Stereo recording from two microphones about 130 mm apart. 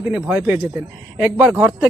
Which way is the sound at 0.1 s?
10° right (ahead or behind).